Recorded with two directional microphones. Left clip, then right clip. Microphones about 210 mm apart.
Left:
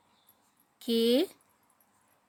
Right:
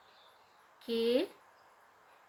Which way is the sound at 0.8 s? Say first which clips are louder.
Left 4 dB; 45° left (ahead or behind).